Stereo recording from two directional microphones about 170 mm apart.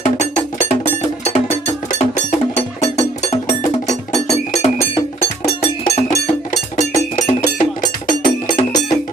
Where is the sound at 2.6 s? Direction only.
40° left (ahead or behind).